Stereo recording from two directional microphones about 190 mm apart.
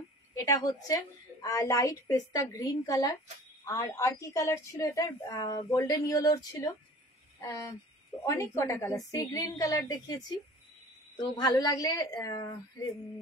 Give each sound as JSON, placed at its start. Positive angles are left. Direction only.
{"t": 0.3, "sound": "a woman's voice", "side_deg": 20}